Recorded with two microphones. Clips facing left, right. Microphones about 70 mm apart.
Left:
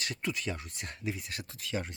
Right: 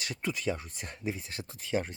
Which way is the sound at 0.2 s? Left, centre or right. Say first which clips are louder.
Right 6 dB; right.